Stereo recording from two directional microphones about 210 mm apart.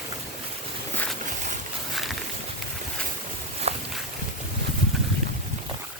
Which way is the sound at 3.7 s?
30° right (ahead or behind).